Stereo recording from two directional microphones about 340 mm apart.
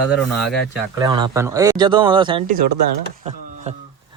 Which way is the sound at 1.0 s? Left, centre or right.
Centre.